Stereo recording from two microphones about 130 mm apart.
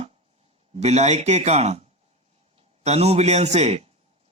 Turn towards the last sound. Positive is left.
turn(degrees=-55)  # may be behind; listen again after turning